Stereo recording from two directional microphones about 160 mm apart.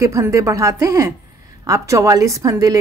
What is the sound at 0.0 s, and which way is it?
A woman's voice, 20° right (ahead or behind).